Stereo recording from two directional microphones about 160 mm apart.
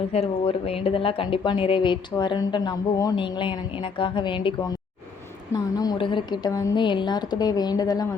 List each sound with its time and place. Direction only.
0.1 s a woman's voice: 40° left (ahead or behind); by 8.0 s 25° left (ahead or behind)